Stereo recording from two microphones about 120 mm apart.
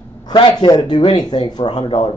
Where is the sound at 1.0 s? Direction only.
50° left (ahead or behind).